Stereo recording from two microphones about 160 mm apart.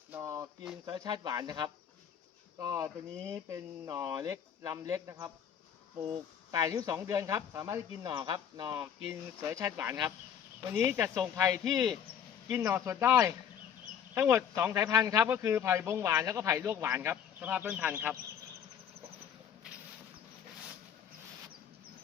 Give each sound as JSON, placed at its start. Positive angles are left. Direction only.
{"t": 0.1, "sound": "a sound", "side_deg": -20}
{"t": 0.9, "sound": "speech", "side_deg": -25}
{"t": 6.5, "sound": "speech", "side_deg": -20}
{"t": 9.0, "sound": "speech", "side_deg": -15}